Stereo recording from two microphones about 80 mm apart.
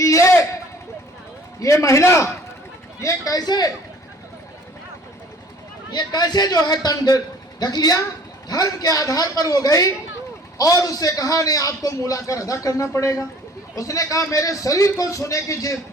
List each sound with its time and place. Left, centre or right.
0.0 s a sound: left
1.5 s a man's voice: left
3.0 s a man's voice: left
5.9 s a man's voice: left